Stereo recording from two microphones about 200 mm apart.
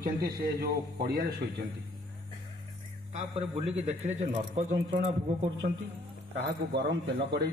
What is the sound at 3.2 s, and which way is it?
A man's voice, 25° right (ahead or behind).